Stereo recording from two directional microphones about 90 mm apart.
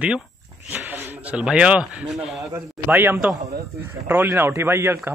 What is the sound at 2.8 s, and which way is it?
A man's voice, 20° right (ahead or behind).